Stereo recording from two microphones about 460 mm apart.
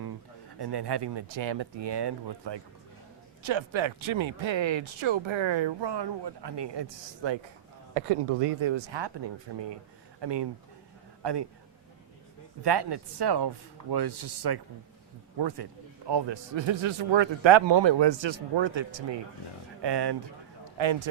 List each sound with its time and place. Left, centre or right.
0.6 s speech: right
3.4 s speech: right
8.6 s a man's voice: right
12.6 s speech: right
16.0 s speech: right
19.8 s speech: right
20.7 s speech: right